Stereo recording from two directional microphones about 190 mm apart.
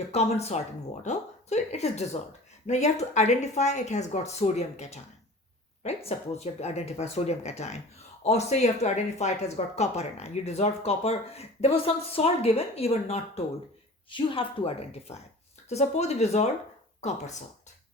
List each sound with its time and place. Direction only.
0.1 s speech: 35° left (ahead or behind)
6.1 s speech: 35° left (ahead or behind)